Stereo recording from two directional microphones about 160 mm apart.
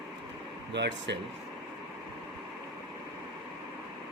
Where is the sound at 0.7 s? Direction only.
90° right.